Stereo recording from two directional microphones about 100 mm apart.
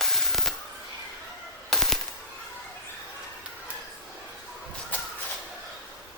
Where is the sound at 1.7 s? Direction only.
5° left (ahead or behind).